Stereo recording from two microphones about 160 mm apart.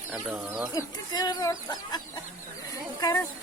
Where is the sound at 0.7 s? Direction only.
25° left (ahead or behind).